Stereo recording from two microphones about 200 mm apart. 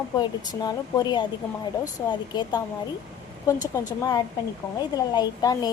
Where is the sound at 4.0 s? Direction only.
20° left (ahead or behind).